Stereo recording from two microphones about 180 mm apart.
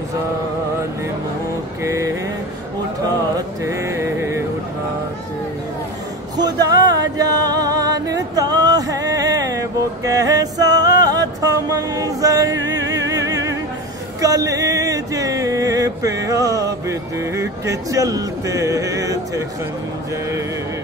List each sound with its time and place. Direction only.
1.8 s music: 15° right (ahead or behind)
3.3 s music: 15° right (ahead or behind)
6.3 s music: 20° right (ahead or behind)
14.2 s a sound: 20° right (ahead or behind)